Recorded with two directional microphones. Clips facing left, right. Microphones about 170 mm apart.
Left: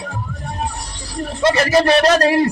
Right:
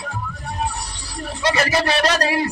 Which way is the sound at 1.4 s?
55° left (ahead or behind).